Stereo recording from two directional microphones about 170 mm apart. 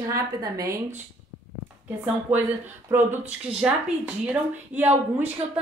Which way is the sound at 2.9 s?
10° right (ahead or behind).